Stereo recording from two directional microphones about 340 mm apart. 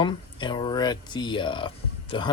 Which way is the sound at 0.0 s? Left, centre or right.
Centre.